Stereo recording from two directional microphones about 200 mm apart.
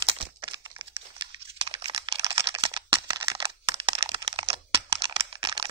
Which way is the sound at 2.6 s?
25° right (ahead or behind).